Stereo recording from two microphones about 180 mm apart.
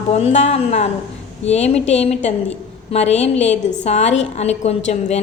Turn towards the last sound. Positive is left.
turn(degrees=40)  # may be behind; listen again after turning